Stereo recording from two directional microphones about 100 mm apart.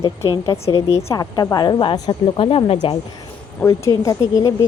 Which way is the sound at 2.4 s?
65° left (ahead or behind).